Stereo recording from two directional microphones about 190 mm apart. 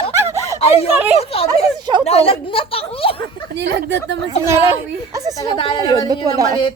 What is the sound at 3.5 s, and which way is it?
Speech, 65° right (ahead or behind).